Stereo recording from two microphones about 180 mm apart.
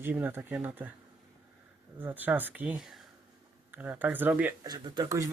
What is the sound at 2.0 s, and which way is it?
Speech, 10° right (ahead or behind).